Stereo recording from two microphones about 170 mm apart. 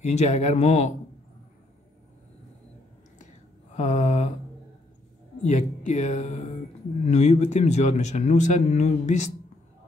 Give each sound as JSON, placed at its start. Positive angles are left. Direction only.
{"t": 0.0, "sound": "speech", "side_deg": 40}
{"t": 3.7, "sound": "a man's voice", "side_deg": 45}
{"t": 5.4, "sound": "a man's voice", "side_deg": 45}